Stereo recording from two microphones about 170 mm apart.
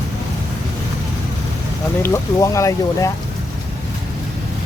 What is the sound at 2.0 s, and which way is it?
Speech, 15° left (ahead or behind).